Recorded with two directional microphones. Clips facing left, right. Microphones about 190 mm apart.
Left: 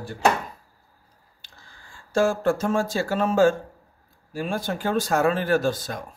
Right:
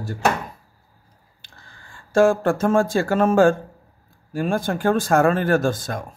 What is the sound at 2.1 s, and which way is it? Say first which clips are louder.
Speech: right 4 dB; 55° right (ahead or behind).